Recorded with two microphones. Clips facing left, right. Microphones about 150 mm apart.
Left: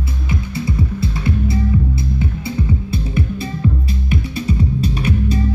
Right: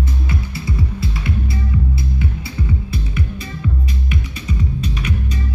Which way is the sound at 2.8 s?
30° left (ahead or behind).